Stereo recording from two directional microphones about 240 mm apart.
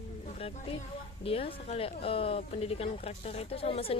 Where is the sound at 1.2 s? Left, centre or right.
Left.